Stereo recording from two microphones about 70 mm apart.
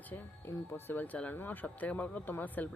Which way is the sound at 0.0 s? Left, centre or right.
Left.